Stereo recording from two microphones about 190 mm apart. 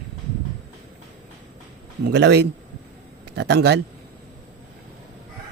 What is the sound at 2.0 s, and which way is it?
Speech, 65° right (ahead or behind).